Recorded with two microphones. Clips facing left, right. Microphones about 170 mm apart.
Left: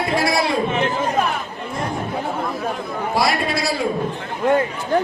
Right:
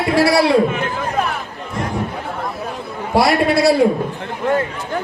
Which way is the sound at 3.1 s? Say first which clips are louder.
Right 7 dB; 65° right (ahead or behind).